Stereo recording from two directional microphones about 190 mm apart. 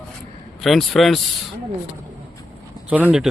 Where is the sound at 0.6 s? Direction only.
Centre (ahead or behind).